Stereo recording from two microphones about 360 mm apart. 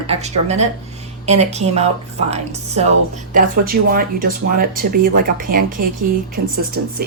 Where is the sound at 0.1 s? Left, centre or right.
Centre.